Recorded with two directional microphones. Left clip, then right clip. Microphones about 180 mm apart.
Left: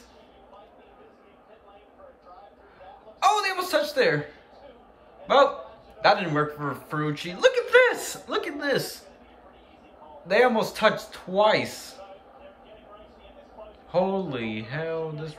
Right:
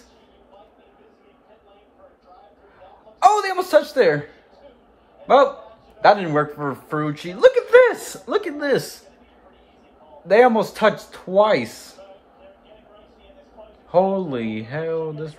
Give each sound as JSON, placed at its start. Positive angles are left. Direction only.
{"t": 3.2, "sound": "a sound", "side_deg": -40}
{"t": 5.2, "sound": "a man's voice", "side_deg": -30}
{"t": 6.8, "sound": "speech", "side_deg": -30}
{"t": 10.2, "sound": "a man's voice", "side_deg": -40}
{"t": 13.9, "sound": "a man's voice", "side_deg": -35}